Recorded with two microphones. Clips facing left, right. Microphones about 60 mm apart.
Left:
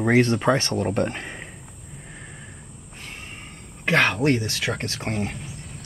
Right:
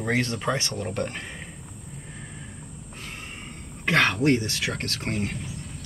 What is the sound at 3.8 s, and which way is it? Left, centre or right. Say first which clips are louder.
Speech: left 1 dB; left.